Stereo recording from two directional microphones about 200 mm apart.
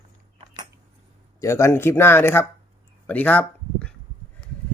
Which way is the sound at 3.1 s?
10° left (ahead or behind).